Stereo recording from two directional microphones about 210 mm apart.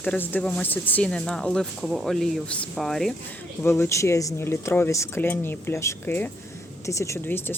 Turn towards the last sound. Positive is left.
turn(degrees=10)  # may be behind; listen again after turning